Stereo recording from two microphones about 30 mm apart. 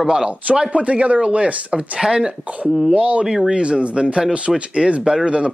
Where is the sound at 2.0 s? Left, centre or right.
Right.